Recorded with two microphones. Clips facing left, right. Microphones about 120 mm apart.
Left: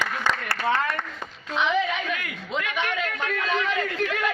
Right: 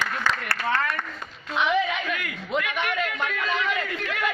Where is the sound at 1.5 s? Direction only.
5° right (ahead or behind).